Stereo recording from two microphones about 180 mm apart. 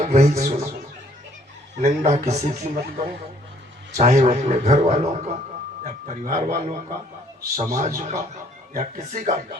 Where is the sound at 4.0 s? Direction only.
40° right (ahead or behind).